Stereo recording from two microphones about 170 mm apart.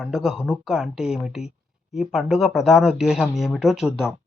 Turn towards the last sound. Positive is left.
turn(degrees=-5)  # may be behind; listen again after turning